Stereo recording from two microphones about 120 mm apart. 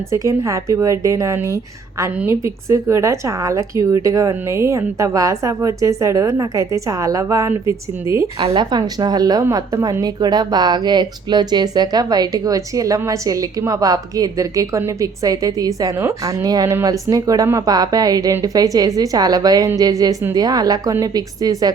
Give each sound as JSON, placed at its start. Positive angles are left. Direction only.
{"t": 0.1, "sound": "a woman's voice", "side_deg": -25}
{"t": 8.5, "sound": "speech", "side_deg": -35}